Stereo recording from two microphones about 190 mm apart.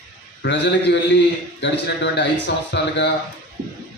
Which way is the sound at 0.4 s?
70° left (ahead or behind).